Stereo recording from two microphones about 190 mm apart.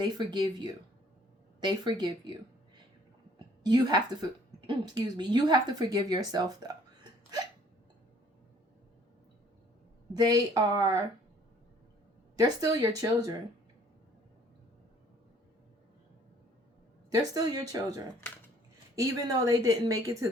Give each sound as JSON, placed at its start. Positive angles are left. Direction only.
{"t": 0.0, "sound": "a woman's voice", "side_deg": -25}
{"t": 10.2, "sound": "a woman's voice", "side_deg": -20}
{"t": 12.4, "sound": "a woman's voice", "side_deg": -20}
{"t": 17.1, "sound": "a woman's voice", "side_deg": -20}